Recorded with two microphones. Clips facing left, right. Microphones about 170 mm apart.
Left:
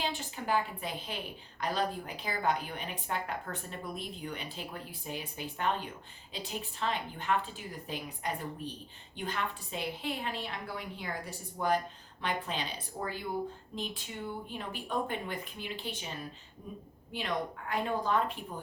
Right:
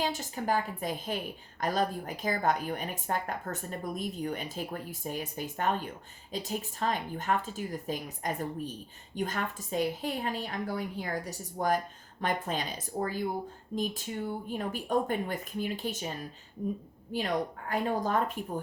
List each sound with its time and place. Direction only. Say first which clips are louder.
0.0 s a woman's voice: right 4 dB; 40° right (ahead or behind)